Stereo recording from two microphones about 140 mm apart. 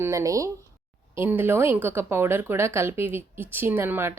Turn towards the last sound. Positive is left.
turn(degrees=-15)  # may be behind; listen again after turning